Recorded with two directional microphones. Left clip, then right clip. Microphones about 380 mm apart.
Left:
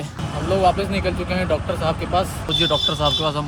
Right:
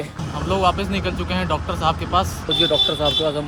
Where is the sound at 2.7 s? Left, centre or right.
Left.